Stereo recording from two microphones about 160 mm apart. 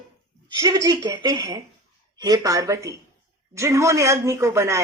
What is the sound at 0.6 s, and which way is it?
Speech, 20° right (ahead or behind).